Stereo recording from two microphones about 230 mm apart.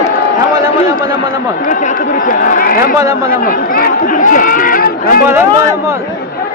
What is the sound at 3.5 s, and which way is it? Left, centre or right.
Speech, left.